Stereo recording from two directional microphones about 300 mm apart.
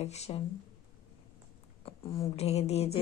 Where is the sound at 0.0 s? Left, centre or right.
Left.